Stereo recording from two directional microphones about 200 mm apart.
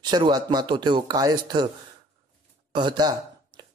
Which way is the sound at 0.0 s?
20° right (ahead or behind).